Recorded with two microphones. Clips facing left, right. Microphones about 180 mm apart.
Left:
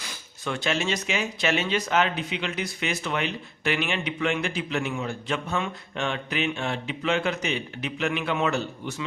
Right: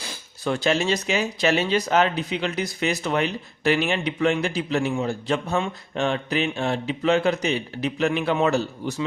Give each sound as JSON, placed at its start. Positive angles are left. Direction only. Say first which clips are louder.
{"t": 0.0, "sound": "speech", "louder": "right 6 dB", "side_deg": -35}